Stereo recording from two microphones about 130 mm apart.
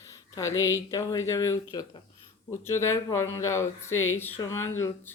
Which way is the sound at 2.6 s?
20° left (ahead or behind).